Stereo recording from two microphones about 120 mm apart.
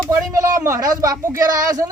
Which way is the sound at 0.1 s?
25° right (ahead or behind).